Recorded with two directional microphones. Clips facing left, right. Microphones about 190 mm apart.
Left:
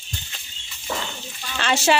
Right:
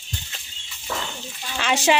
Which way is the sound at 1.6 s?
15° right (ahead or behind).